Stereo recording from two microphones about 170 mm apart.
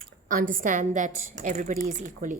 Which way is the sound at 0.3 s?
55° right (ahead or behind).